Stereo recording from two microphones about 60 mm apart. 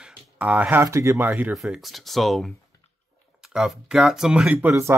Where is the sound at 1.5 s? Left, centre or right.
Centre.